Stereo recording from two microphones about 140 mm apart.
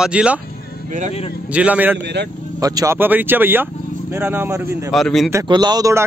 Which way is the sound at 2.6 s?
25° right (ahead or behind).